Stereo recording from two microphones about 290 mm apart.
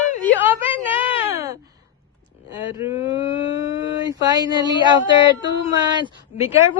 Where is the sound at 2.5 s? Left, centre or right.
Centre.